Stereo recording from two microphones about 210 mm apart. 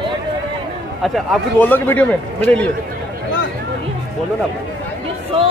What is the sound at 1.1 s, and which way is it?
Speech, 10° left (ahead or behind).